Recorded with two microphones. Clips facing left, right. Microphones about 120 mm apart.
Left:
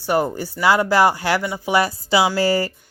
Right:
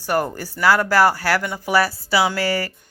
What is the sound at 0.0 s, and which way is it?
Speech, 15° left (ahead or behind).